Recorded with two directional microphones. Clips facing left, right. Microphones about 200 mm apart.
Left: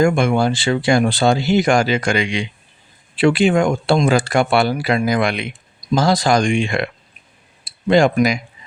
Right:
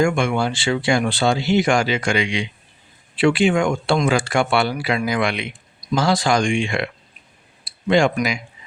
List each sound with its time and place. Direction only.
0.0 s speech: 40° left (ahead or behind)